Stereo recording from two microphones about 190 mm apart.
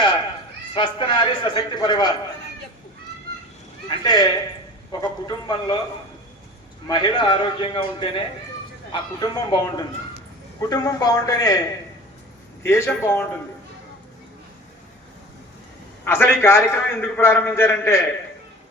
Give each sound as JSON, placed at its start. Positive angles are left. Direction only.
{"t": 0.7, "sound": "a man's voice", "side_deg": 25}
{"t": 3.8, "sound": "a man's voice", "side_deg": 20}
{"t": 6.8, "sound": "a man's voice", "side_deg": 20}
{"t": 12.6, "sound": "a man's voice", "side_deg": 15}
{"t": 16.0, "sound": "a man's voice", "side_deg": 10}